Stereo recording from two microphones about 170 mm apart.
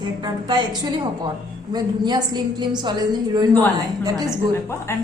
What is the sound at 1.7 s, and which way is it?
A woman's voice, 25° right (ahead or behind).